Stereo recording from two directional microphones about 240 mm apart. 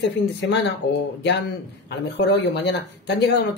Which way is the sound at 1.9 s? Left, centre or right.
Left.